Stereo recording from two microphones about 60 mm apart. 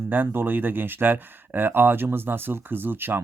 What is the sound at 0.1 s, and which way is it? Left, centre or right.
Speech, right.